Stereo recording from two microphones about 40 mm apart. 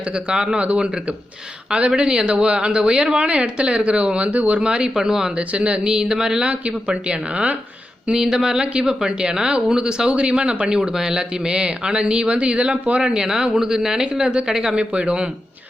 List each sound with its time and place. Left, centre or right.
0.3 s speech: right
0.6 s speech: right
2.0 s speech: right
4.6 s speech: right
5.4 s speech: right
6.5 s speech: right
8.2 s speech: centre
10.8 s speech: centre; by 13.0 s right
13.0 s speech: centre